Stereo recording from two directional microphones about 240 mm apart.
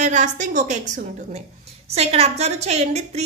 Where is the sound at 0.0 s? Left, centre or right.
Right.